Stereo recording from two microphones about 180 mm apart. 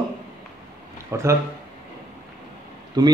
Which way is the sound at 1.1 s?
15° right (ahead or behind).